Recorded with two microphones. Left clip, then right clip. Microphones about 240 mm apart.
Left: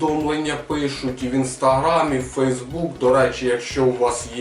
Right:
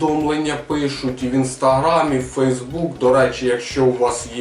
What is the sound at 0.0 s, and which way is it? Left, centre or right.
Speech, left.